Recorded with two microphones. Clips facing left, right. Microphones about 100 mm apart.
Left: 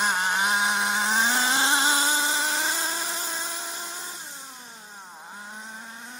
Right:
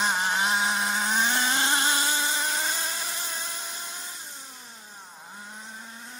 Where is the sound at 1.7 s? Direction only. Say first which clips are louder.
Left 2 dB; 25° left (ahead or behind).